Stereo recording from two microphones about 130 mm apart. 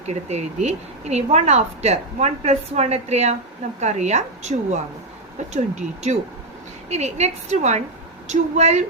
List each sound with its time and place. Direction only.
0.1 s speech: 60° right (ahead or behind)